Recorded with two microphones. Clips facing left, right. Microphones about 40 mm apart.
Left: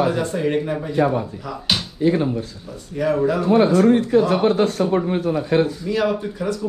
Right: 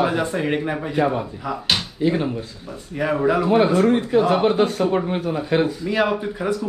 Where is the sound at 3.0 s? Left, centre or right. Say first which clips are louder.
Even; right.